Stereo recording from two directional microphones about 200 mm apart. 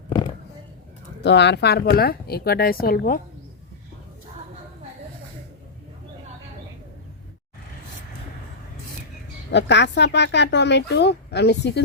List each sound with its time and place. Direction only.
1.2 s a woman's voice: 60° left (ahead or behind)
9.5 s speech: 60° left (ahead or behind)